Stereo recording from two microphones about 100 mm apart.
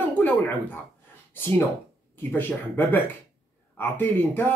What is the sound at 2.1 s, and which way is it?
Speech, 20° left (ahead or behind).